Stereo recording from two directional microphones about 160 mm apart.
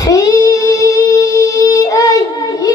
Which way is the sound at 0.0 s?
20° left (ahead or behind).